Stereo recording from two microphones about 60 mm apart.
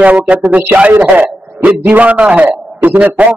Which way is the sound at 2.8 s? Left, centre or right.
Right.